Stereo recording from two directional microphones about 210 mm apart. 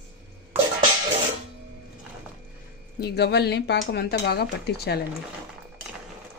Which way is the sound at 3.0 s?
50° left (ahead or behind).